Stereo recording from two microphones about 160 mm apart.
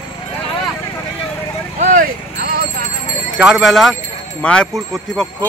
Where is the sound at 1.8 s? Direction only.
60° right (ahead or behind).